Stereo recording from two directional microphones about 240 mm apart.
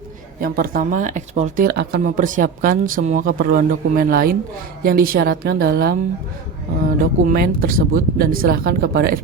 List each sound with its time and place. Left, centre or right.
0.4 s speech: right
7.0 s speech: right